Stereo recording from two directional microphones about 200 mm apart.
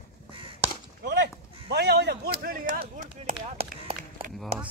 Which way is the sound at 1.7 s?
55° right (ahead or behind).